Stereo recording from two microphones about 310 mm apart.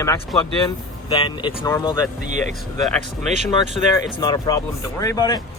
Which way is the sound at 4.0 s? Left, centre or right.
Centre.